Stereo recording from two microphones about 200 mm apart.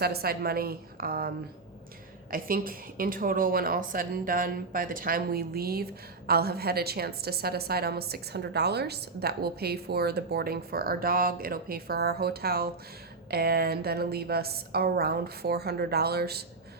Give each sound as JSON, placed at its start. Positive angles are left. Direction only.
{"t": 0.0, "sound": "speech", "side_deg": -50}
{"t": 2.3, "sound": "speech", "side_deg": -45}